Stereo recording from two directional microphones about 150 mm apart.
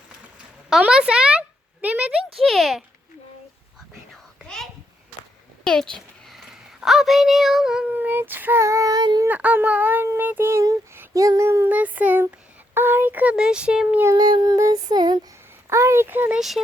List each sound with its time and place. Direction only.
0.7 s speech: 5° right (ahead or behind)
4.4 s a sound: 5° left (ahead or behind)
5.6 s a child's voice: 5° left (ahead or behind); by 9.2 s 25° right (ahead or behind)
9.2 s speech: 10° right (ahead or behind)
14.0 s child singing: 25° right (ahead or behind)
15.7 s speech: 20° right (ahead or behind)